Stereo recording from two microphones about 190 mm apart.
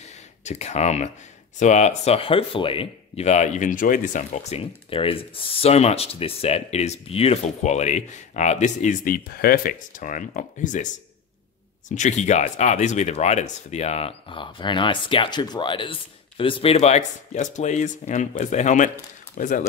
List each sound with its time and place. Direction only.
0.4 s speech: 35° left (ahead or behind)
11.9 s speech: 40° left (ahead or behind)